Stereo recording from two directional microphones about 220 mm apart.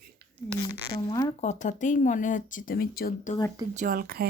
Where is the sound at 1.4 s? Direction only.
35° left (ahead or behind).